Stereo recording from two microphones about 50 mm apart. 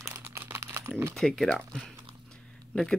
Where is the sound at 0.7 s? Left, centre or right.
Right.